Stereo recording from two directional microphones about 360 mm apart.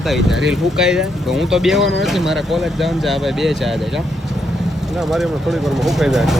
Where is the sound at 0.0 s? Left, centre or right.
Centre.